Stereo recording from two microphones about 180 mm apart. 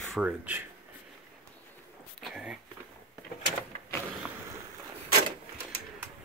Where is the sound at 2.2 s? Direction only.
5° right (ahead or behind).